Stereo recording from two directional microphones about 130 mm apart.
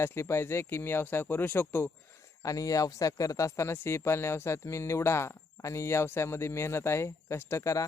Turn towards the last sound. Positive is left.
turn(degrees=25)  # may be behind; listen again after turning